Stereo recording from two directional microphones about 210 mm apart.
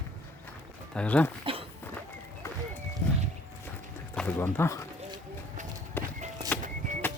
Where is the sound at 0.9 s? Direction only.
5° left (ahead or behind).